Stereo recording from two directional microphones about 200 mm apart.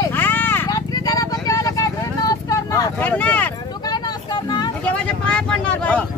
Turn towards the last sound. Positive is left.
turn(degrees=5)  # may be behind; listen again after turning